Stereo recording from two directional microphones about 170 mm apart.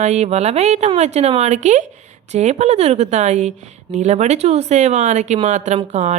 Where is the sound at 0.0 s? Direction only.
45° right (ahead or behind).